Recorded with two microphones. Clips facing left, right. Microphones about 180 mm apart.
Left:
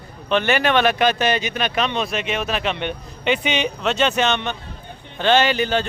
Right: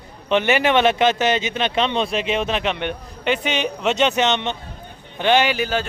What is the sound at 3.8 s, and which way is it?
Speech, 20° right (ahead or behind).